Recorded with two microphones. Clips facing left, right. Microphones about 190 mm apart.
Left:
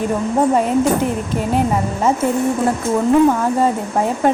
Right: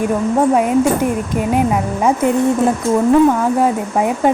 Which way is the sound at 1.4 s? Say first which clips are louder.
Right 2 dB; 10° right (ahead or behind).